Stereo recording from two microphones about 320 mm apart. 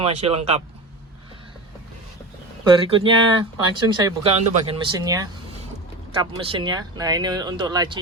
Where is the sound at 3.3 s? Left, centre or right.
Centre.